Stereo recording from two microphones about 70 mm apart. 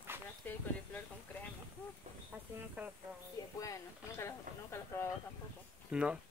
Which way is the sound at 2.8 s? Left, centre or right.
Right.